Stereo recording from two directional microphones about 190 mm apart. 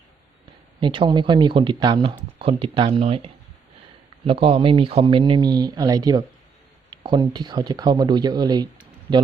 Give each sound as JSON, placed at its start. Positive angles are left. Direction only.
{"t": 0.8, "sound": "speech", "side_deg": -25}